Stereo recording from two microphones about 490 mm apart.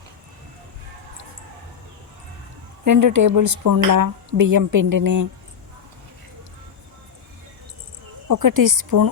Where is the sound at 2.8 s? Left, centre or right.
Right.